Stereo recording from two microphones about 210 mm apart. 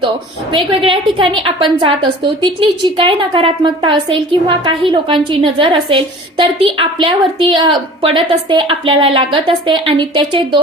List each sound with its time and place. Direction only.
0.5 s a woman's voice: 25° right (ahead or behind)